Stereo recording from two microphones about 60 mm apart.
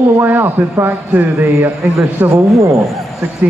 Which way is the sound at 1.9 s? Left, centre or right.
Right.